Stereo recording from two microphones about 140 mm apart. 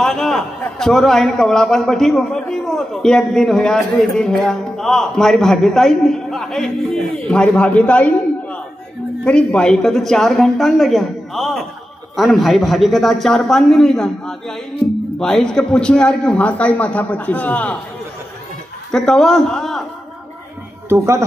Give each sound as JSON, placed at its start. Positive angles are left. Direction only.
{"t": 0.0, "sound": "a man's voice", "side_deg": 0}
{"t": 18.9, "sound": "a man's voice", "side_deg": 5}
{"t": 20.9, "sound": "speech", "side_deg": -20}